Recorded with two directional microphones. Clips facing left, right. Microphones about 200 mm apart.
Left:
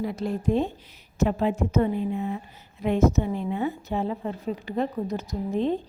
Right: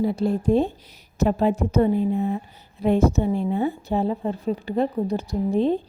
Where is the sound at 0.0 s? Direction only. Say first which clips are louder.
Right 5 dB; 30° right (ahead or behind).